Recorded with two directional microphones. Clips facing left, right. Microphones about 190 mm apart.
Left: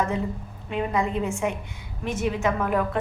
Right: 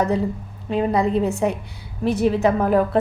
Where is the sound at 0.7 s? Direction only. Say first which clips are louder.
Right 6 dB; 35° right (ahead or behind).